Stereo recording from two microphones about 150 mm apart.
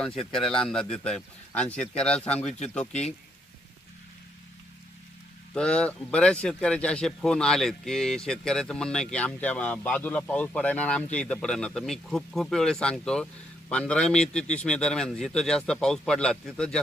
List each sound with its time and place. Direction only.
0.0 s speech: centre (ahead or behind)
5.5 s speech: 5° left (ahead or behind)